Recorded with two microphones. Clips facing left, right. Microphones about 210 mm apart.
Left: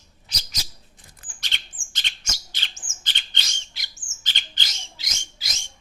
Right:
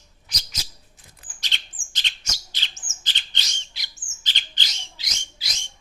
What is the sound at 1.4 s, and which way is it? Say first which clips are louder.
Bird: even; 50° left (ahead or behind).